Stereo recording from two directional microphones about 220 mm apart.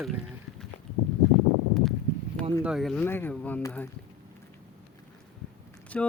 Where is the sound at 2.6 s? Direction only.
Centre (ahead or behind).